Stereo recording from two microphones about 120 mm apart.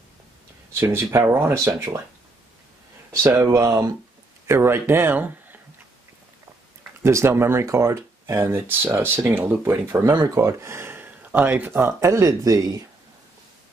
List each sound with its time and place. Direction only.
0.7 s speech: 20° right (ahead or behind)
3.1 s a sound: 25° right (ahead or behind)
3.4 s speech: 30° right (ahead or behind)
7.0 s speech: 20° right (ahead or behind)